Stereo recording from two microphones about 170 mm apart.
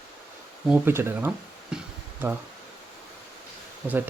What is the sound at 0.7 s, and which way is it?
Speech, 15° right (ahead or behind).